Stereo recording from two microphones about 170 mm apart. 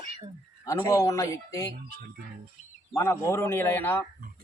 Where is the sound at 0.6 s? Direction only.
20° left (ahead or behind).